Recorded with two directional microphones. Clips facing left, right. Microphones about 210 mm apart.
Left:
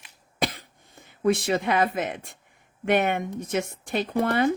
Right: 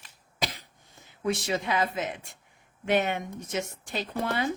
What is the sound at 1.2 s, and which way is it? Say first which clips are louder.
Speech: left 6 dB; 55° left (ahead or behind).